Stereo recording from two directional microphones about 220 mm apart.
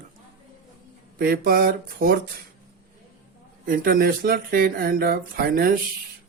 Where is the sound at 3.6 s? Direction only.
40° right (ahead or behind).